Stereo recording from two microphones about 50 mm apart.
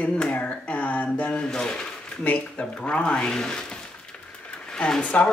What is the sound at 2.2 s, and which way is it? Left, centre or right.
Speech, left.